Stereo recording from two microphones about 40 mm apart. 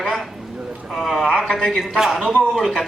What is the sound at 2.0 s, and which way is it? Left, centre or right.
Speech, centre.